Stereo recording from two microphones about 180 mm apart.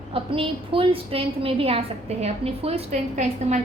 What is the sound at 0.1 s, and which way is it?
A woman's voice, 30° right (ahead or behind).